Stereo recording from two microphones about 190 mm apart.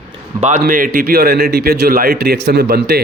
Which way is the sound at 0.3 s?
40° right (ahead or behind).